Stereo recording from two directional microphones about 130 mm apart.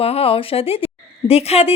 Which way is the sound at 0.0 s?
50° left (ahead or behind).